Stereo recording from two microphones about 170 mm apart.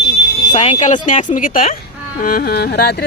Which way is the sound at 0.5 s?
40° left (ahead or behind).